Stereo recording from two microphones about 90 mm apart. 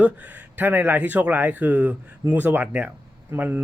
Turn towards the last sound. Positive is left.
turn(degrees=-20)  # may be behind; listen again after turning